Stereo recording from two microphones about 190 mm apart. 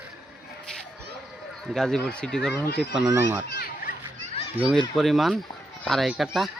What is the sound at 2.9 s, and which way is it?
Speech, 10° right (ahead or behind).